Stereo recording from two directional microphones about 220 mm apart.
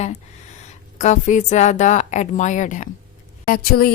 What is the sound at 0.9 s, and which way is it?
Speech, 35° left (ahead or behind).